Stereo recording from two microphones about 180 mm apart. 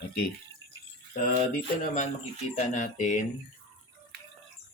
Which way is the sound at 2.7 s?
45° left (ahead or behind).